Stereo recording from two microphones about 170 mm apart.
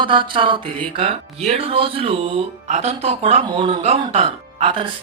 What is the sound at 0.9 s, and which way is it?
A woman's voice, 35° right (ahead or behind).